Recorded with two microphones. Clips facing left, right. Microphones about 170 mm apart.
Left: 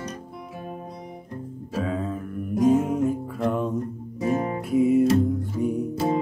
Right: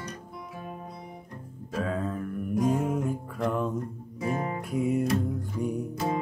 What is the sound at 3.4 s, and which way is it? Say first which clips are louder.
Music: left 3 dB; centre (ahead or behind).